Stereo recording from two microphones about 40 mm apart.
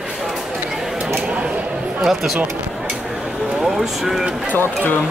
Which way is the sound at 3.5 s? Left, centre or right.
Centre.